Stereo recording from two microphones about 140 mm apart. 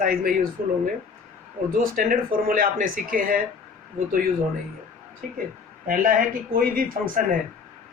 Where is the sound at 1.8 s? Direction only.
90° right.